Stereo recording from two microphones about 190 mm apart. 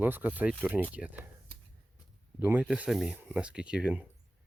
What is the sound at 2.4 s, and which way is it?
Speech, 10° right (ahead or behind).